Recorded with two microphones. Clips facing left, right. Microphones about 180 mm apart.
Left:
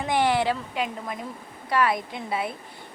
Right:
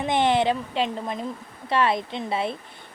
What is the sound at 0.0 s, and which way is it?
A woman's voice, 20° right (ahead or behind).